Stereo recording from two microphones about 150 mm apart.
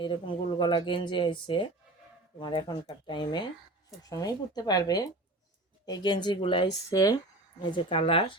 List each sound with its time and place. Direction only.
0.0 s speech: 30° left (ahead or behind)